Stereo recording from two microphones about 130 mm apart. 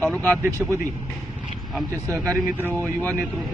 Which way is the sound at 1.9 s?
20° right (ahead or behind).